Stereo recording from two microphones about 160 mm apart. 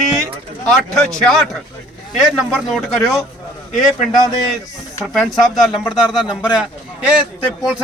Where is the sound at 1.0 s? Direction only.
Centre (ahead or behind).